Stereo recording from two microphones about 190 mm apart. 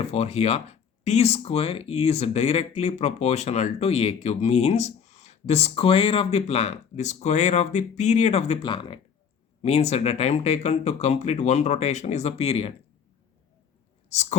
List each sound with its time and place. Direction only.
0.0 s speech: 35° left (ahead or behind)
14.1 s speech: 35° left (ahead or behind)